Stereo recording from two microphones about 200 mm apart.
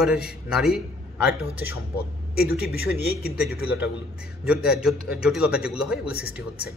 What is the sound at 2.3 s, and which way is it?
Speech, 50° left (ahead or behind).